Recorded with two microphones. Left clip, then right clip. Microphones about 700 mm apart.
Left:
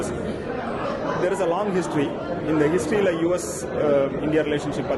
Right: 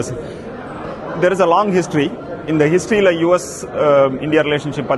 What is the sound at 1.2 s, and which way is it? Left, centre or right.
A man's voice, right.